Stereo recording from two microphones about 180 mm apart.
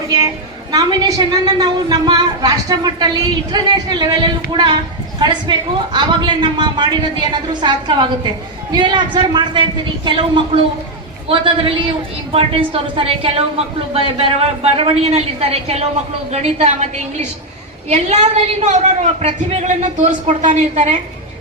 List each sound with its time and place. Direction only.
0.7 s a woman's voice: 20° right (ahead or behind); by 20.9 s 45° right (ahead or behind)